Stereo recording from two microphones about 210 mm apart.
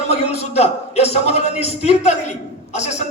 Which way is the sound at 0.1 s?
30° left (ahead or behind).